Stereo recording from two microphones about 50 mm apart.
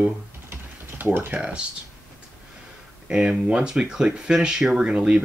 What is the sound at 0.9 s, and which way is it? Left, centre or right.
Speech, right.